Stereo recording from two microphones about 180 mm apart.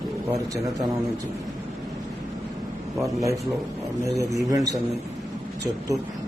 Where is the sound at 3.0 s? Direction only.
15° right (ahead or behind).